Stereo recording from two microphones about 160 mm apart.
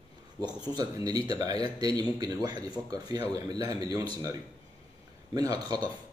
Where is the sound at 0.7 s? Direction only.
25° right (ahead or behind).